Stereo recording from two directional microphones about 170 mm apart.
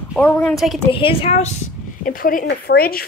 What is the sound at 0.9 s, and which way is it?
Speech, 35° left (ahead or behind).